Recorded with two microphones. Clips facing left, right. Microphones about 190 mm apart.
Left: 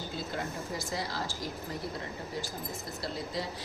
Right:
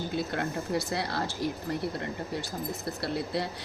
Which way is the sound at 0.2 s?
65° right (ahead or behind).